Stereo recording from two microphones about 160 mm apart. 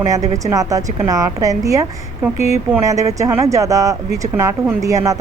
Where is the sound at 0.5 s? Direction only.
20° right (ahead or behind).